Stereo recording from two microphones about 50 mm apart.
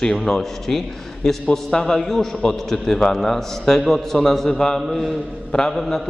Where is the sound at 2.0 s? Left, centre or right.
Centre.